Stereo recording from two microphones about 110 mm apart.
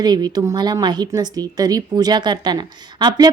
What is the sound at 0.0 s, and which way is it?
A woman's voice, 40° right (ahead or behind).